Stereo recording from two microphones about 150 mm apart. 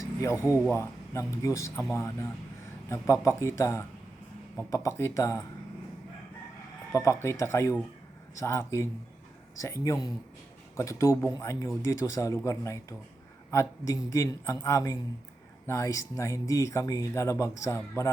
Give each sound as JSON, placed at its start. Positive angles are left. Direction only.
{"t": 0.0, "sound": "speech", "side_deg": 20}
{"t": 6.9, "sound": "speech", "side_deg": 20}